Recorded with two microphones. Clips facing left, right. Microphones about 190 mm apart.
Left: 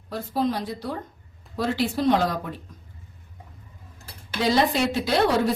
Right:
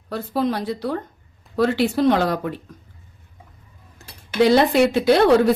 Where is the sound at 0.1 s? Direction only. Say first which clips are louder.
Right 3 dB; 65° right (ahead or behind).